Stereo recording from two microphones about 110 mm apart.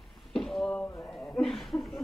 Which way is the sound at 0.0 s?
Centre (ahead or behind).